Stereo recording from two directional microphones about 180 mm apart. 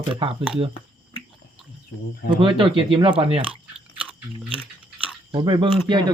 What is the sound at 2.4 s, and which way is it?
Speech, 30° right (ahead or behind).